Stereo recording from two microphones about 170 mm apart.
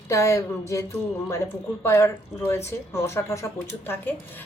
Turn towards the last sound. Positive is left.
turn(degrees=10)  # may be behind; listen again after turning